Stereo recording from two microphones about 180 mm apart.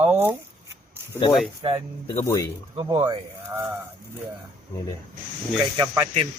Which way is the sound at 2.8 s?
20° right (ahead or behind).